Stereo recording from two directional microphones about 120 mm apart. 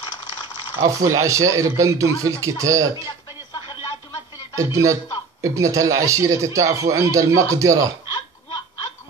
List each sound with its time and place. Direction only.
0.7 s a man's voice: 30° right (ahead or behind)
4.6 s a man's voice: 25° right (ahead or behind)